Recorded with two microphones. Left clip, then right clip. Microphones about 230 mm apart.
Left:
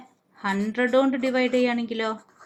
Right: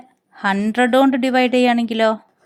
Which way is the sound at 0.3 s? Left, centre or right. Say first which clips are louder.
Right 8 dB; right.